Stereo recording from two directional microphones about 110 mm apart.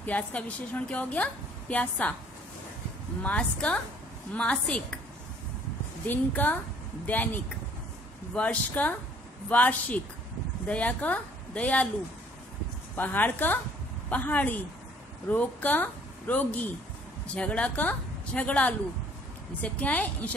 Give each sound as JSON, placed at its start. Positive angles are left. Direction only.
{"t": 0.0, "sound": "a woman's voice", "side_deg": 15}
{"t": 3.2, "sound": "a woman's voice", "side_deg": 10}
{"t": 6.0, "sound": "a woman's voice", "side_deg": 15}
{"t": 12.9, "sound": "a woman's voice", "side_deg": 15}